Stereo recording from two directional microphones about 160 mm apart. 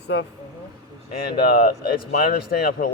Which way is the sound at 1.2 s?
70° left (ahead or behind).